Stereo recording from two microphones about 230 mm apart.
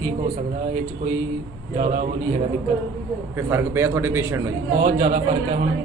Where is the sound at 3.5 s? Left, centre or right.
Centre.